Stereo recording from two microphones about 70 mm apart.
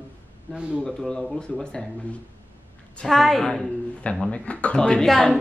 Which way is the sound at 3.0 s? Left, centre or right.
Centre.